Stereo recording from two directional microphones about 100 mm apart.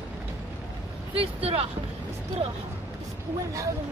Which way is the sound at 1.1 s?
70° right (ahead or behind).